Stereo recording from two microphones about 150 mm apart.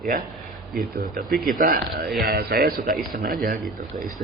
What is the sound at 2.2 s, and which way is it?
Speech, 90° right.